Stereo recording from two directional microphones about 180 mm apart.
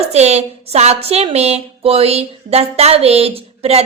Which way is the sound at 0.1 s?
40° right (ahead or behind).